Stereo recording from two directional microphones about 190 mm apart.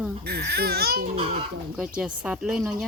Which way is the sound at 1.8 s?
5° right (ahead or behind).